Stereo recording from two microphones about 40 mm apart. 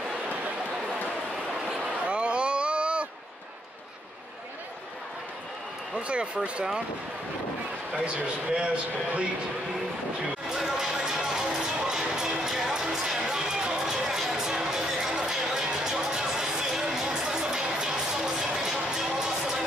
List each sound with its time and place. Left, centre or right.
1.8 s a sound: right
5.9 s speech: right
10.5 s run: centre
11.9 s music: centre